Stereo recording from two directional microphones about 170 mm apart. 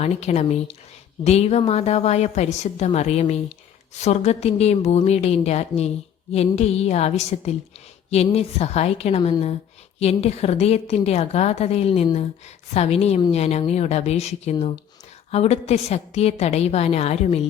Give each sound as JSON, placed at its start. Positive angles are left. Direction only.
{"t": 0.0, "sound": "a woman's voice", "side_deg": 40}